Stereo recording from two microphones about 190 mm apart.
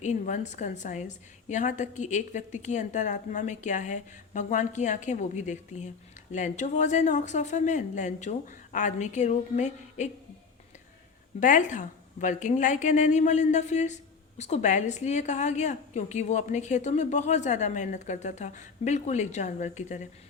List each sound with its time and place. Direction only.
0.0 s a woman's voice: 40° left (ahead or behind)
11.3 s a woman's voice: 40° left (ahead or behind)